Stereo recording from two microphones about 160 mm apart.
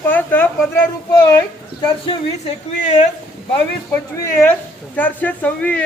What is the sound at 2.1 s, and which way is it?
Speech, 35° left (ahead or behind).